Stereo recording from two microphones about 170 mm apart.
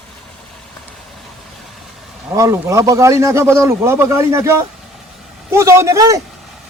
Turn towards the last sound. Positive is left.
turn(degrees=-20)  # may be behind; listen again after turning